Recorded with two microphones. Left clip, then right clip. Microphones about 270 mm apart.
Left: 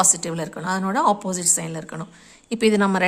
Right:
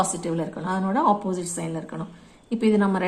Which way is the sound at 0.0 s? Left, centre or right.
Left.